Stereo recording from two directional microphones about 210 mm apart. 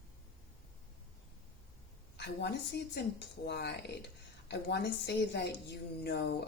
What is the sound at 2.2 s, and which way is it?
Speech, 55° left (ahead or behind).